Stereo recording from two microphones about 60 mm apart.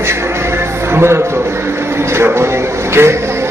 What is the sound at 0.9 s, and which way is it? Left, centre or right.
Speech, right.